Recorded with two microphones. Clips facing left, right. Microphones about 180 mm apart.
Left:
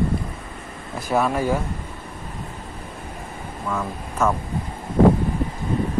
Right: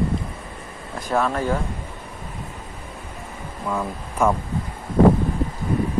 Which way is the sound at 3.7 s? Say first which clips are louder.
Right 1 dB; 10° right (ahead or behind).